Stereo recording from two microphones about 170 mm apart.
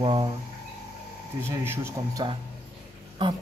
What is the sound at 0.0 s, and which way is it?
Speech, 30° right (ahead or behind).